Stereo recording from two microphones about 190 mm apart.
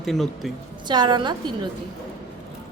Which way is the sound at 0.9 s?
25° right (ahead or behind).